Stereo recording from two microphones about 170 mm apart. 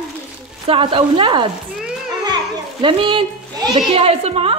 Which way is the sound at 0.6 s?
30° right (ahead or behind).